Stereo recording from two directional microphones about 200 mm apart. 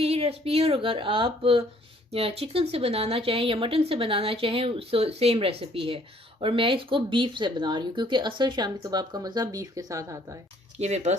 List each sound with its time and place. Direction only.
0.0 s speech: 30° right (ahead or behind)
10.8 s speech: 35° right (ahead or behind)